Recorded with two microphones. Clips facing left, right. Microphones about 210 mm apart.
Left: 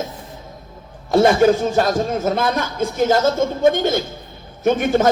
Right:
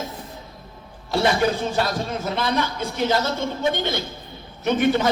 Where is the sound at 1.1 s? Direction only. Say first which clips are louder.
Left 7 dB; 45° left (ahead or behind).